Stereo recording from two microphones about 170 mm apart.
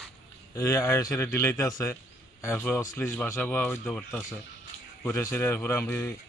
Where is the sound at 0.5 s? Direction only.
20° left (ahead or behind).